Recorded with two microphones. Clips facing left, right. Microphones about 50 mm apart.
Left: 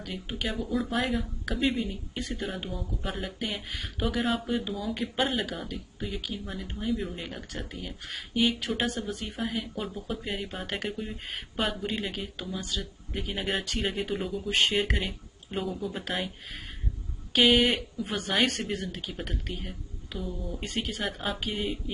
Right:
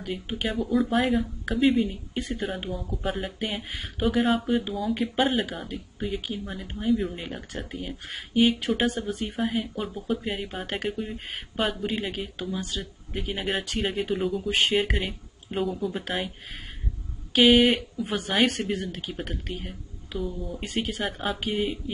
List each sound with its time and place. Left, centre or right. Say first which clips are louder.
0.0 s speech: right 4 dB; centre
0.5 s speech: right 6 dB; centre
6.4 s speech: right 4 dB; centre
8.9 s speech: right 3 dB; right
9.2 s speech: right 5 dB; centre
17.3 s speech: right 4 dB; centre